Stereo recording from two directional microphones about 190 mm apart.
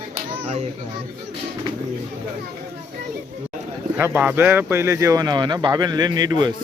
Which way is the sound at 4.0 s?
10° right (ahead or behind).